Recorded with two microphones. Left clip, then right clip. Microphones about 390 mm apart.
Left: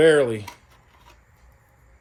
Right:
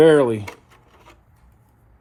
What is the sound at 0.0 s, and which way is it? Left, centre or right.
Speech, centre.